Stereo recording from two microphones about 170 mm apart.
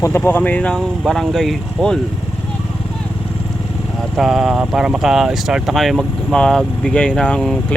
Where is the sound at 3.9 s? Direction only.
Centre (ahead or behind).